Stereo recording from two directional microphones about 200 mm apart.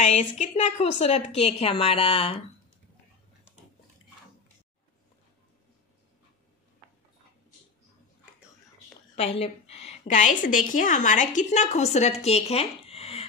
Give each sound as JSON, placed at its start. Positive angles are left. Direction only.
{"t": 0.0, "sound": "a woman's voice", "side_deg": 35}
{"t": 9.1, "sound": "a woman's voice", "side_deg": 30}